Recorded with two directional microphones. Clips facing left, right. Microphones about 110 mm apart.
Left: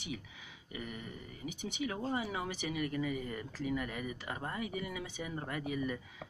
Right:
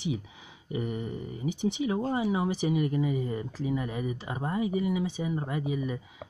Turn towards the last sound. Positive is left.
turn(degrees=-15)  # may be behind; listen again after turning